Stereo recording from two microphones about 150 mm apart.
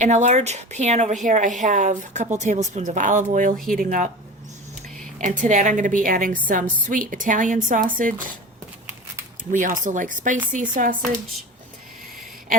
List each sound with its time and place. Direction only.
0.0 s speech: 50° right (ahead or behind)
5.2 s speech: 55° right (ahead or behind)
8.9 s a sound: 15° right (ahead or behind)
9.5 s speech: 60° right (ahead or behind)